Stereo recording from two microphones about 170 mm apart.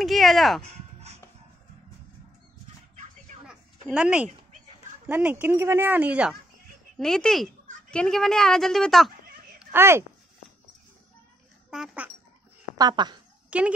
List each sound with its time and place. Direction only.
0.0 s a woman's voice: centre (ahead or behind)
3.4 s a sound: 5° right (ahead or behind)
5.0 s speech: 10° right (ahead or behind)
7.0 s a woman's voice: 5° left (ahead or behind)
9.6 s speech: 15° right (ahead or behind)
11.7 s a woman's voice: 5° right (ahead or behind)
12.7 s speech: 25° right (ahead or behind)
13.5 s speech: 5° right (ahead or behind)